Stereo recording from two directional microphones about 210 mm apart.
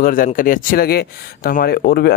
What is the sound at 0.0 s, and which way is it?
Speech, 40° left (ahead or behind).